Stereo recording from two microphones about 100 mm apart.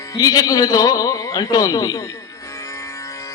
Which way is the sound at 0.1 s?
40° left (ahead or behind).